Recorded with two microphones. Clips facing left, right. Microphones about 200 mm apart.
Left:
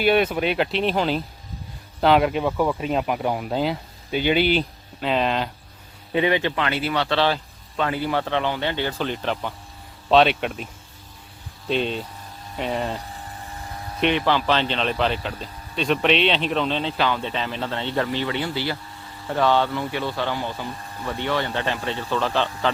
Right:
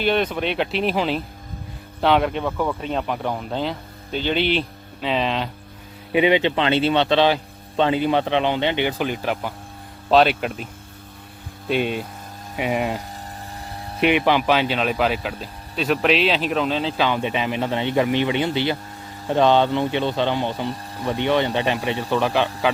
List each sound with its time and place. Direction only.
0.0 s speech: 10° left (ahead or behind)
6.1 s speech: 15° right (ahead or behind)
11.7 s speech: 10° right (ahead or behind)
14.0 s speech: 15° right (ahead or behind)